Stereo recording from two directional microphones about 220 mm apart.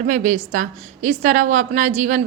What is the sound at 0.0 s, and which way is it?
A woman's voice, 35° right (ahead or behind).